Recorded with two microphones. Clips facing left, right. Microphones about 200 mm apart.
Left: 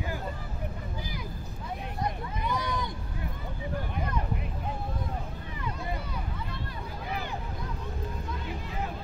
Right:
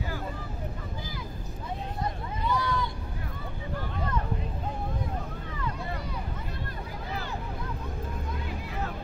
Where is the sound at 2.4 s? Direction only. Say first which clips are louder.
Right 3 dB; 20° left (ahead or behind).